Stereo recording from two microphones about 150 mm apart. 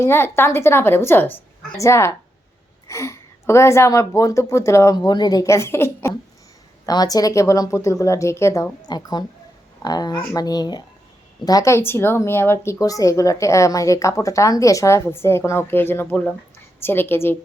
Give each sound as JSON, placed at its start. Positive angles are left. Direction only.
{"t": 0.0, "sound": "a woman's voice", "side_deg": 15}